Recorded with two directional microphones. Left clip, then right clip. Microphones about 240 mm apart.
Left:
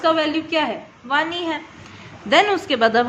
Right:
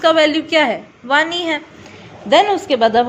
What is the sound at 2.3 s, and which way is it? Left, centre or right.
Speech, centre.